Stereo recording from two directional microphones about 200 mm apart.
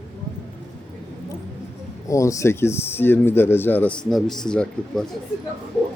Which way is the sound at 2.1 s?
15° left (ahead or behind).